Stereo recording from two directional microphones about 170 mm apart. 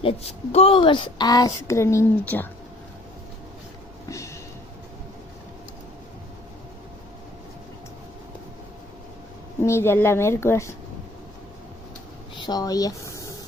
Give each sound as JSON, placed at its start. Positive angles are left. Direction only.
{"t": 0.0, "sound": "a woman's voice", "side_deg": 35}
{"t": 9.6, "sound": "speech", "side_deg": 15}
{"t": 12.4, "sound": "speech", "side_deg": 25}